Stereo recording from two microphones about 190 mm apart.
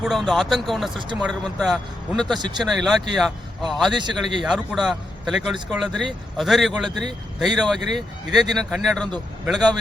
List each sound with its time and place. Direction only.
0.0 s speech: centre (ahead or behind)
3.9 s speech: 25° right (ahead or behind)
4.2 s speech: centre (ahead or behind)